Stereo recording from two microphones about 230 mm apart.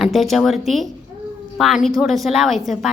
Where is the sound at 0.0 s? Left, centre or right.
Centre.